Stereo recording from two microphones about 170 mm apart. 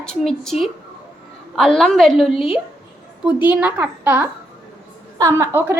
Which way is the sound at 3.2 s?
5° right (ahead or behind).